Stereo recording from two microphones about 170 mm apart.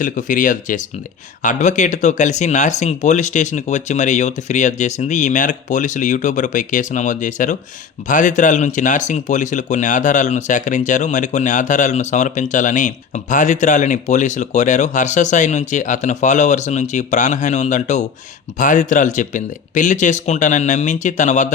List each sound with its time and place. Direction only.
0.0 s speech: 50° left (ahead or behind)